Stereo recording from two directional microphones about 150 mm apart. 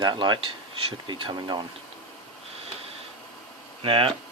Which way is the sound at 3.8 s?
35° right (ahead or behind).